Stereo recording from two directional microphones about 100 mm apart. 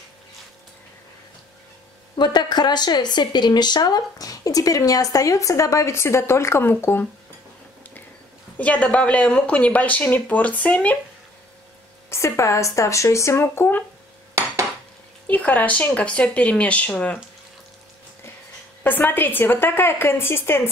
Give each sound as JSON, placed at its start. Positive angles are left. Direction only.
{"t": 2.1, "sound": "speech", "side_deg": 45}
{"t": 8.5, "sound": "speech", "side_deg": 15}
{"t": 12.1, "sound": "speech", "side_deg": 30}
{"t": 15.2, "sound": "speech", "side_deg": 15}
{"t": 18.9, "sound": "speech", "side_deg": 20}